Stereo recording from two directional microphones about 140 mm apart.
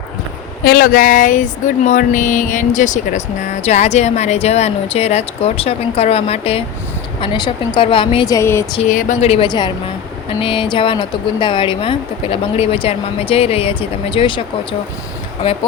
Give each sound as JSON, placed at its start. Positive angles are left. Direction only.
{"t": 0.7, "sound": "a sound", "side_deg": 85}
{"t": 7.2, "sound": "speech", "side_deg": 35}
{"t": 8.3, "sound": "speech", "side_deg": 20}
{"t": 8.9, "sound": "speech", "side_deg": 75}
{"t": 9.2, "sound": "a sound", "side_deg": 45}
{"t": 9.5, "sound": "speech", "side_deg": 30}